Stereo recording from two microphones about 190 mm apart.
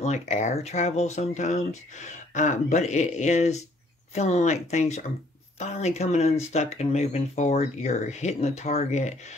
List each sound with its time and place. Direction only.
0.0 s speech: 35° left (ahead or behind)